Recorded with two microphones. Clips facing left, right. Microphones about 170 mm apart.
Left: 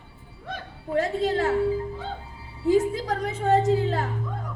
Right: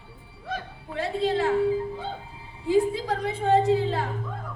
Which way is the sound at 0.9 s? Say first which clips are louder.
Left 2 dB; 45° left (ahead or behind).